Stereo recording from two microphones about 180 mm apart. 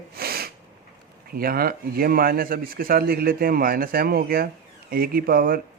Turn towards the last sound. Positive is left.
turn(degrees=-50)  # may be behind; listen again after turning